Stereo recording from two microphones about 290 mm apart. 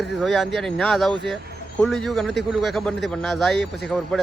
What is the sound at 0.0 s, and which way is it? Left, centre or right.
Speech, centre.